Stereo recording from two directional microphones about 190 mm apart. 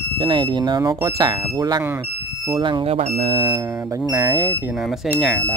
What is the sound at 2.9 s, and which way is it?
Speech, 35° right (ahead or behind).